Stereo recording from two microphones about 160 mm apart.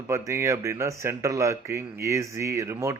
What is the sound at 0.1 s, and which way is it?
Speech, 20° right (ahead or behind).